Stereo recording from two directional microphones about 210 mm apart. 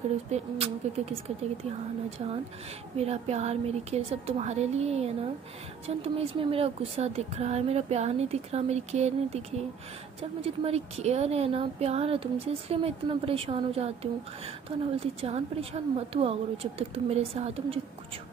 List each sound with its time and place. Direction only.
0.3 s a woman's voice: 30° right (ahead or behind)
15.0 s a woman's voice: 25° right (ahead or behind)